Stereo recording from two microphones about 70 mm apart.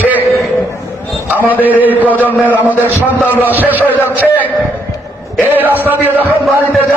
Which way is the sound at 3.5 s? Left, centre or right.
Right.